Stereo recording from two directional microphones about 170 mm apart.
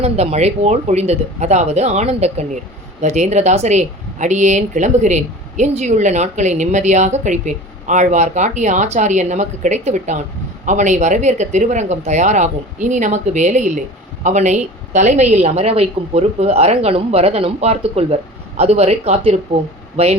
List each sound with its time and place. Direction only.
0.0 s a woman's voice: 40° right (ahead or behind)